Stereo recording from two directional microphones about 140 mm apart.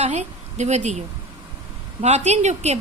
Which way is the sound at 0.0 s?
55° right (ahead or behind).